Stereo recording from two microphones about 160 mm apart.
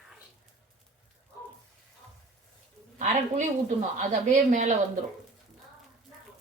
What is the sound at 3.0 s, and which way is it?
Speech, 50° right (ahead or behind).